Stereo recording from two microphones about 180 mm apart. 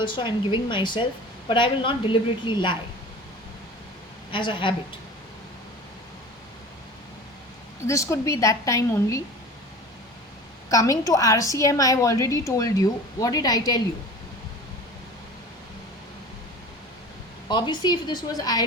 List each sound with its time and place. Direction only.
0.0 s speech: 25° left (ahead or behind)
4.3 s speech: 25° left (ahead or behind)
7.9 s a woman's voice: 15° left (ahead or behind)
10.7 s a woman's voice: 20° left (ahead or behind)
17.5 s speech: 25° left (ahead or behind)